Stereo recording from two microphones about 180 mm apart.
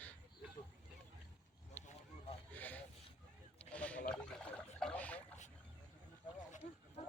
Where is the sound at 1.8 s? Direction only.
10° left (ahead or behind).